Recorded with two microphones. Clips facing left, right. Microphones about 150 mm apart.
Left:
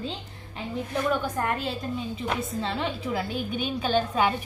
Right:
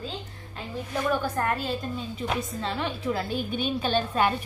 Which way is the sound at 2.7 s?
15° left (ahead or behind).